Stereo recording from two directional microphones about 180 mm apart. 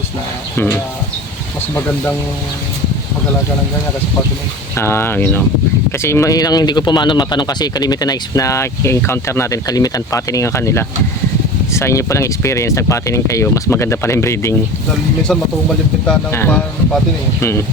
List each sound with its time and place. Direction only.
0.5 s speech: 10° left (ahead or behind)
4.8 s speech: 15° left (ahead or behind)
16.0 s speech: 10° left (ahead or behind)